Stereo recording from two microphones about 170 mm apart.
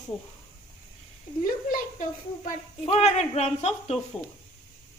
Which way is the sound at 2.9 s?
40° left (ahead or behind).